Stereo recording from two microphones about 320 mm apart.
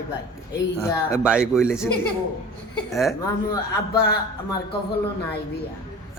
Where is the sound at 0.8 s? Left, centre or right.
Centre.